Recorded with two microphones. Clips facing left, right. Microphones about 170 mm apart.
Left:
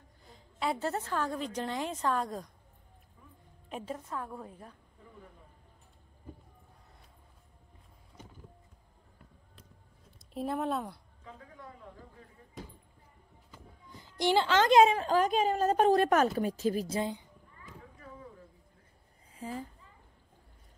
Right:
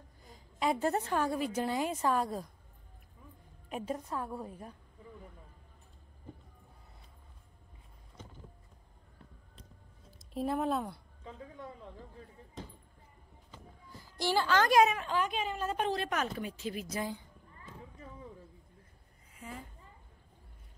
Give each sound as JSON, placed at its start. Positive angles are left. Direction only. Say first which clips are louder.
{"t": 0.6, "sound": "a woman's voice", "louder": "right 2 dB", "side_deg": -15}
{"t": 3.6, "sound": "a woman's voice", "louder": "right 2 dB", "side_deg": -10}
{"t": 10.1, "sound": "speech", "louder": "right 1 dB", "side_deg": 0}
{"t": 13.8, "sound": "a woman's voice", "louder": "left 5 dB", "side_deg": 20}
{"t": 19.3, "sound": "a sound", "louder": "left 7 dB", "side_deg": 30}